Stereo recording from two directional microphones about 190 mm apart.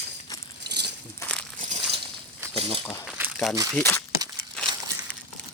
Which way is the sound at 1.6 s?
40° right (ahead or behind).